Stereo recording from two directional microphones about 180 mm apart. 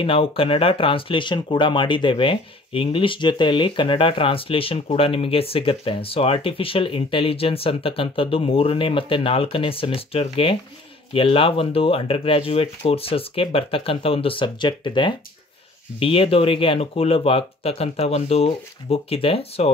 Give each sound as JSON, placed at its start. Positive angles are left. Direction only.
{"t": 0.0, "sound": "speech", "side_deg": 30}